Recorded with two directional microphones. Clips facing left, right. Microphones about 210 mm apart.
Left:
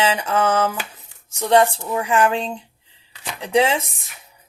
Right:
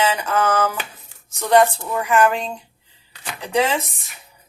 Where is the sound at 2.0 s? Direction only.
30° left (ahead or behind).